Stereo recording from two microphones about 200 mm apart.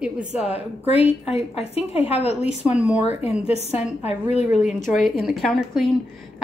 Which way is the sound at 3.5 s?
30° left (ahead or behind).